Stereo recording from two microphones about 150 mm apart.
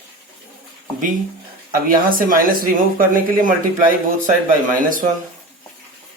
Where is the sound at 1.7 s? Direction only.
70° right (ahead or behind).